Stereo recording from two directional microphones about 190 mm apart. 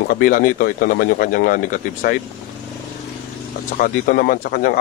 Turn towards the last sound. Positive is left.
turn(degrees=50)  # may be behind; listen again after turning